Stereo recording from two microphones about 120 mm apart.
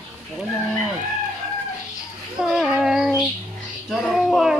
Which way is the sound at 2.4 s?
5° right (ahead or behind).